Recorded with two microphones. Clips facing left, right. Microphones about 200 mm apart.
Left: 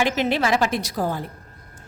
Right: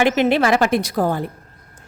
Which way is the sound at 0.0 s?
60° right (ahead or behind).